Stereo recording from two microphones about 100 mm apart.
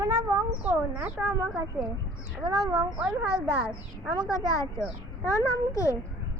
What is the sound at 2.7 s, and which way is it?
Speech, 35° right (ahead or behind).